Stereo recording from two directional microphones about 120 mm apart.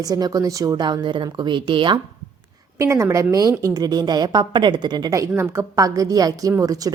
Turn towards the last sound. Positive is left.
turn(degrees=-30)  # may be behind; listen again after turning